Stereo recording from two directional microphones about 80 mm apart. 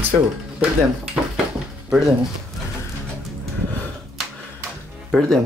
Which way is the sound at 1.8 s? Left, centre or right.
Centre.